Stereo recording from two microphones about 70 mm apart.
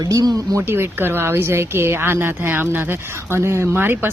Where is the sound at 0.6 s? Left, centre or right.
Right.